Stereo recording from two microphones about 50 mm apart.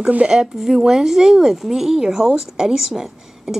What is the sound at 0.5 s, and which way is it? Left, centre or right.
A woman's voice, centre.